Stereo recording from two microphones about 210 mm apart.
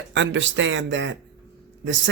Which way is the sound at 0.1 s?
60° right (ahead or behind).